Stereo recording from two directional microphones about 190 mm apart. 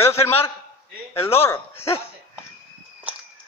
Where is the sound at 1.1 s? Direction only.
30° left (ahead or behind).